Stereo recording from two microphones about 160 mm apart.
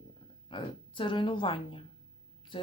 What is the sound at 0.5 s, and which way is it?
A woman's voice, 30° left (ahead or behind).